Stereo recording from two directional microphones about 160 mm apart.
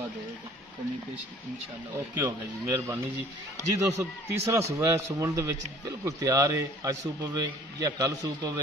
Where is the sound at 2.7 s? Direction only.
15° right (ahead or behind).